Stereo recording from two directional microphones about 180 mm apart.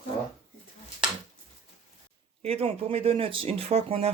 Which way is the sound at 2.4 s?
35° right (ahead or behind).